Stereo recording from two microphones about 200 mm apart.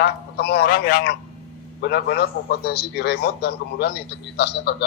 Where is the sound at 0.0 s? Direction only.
55° left (ahead or behind).